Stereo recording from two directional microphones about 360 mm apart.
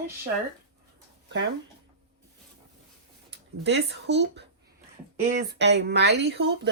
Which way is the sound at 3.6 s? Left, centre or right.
Right.